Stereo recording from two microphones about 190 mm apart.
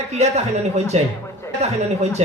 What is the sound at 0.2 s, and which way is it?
Speech, 35° right (ahead or behind).